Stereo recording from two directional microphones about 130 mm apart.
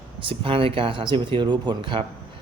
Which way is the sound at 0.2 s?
45° right (ahead or behind).